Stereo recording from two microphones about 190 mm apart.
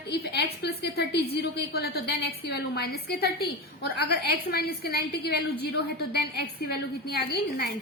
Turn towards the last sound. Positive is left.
turn(degrees=55)  # may be behind; listen again after turning